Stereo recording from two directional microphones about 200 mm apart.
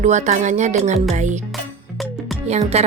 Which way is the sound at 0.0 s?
35° right (ahead or behind).